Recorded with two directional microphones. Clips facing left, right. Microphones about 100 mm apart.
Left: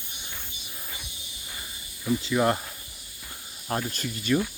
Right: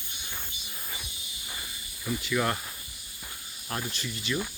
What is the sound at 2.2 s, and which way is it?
Speech, 30° left (ahead or behind).